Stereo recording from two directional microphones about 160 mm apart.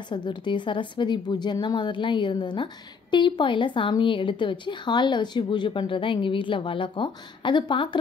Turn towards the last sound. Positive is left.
turn(degrees=30)  # may be behind; listen again after turning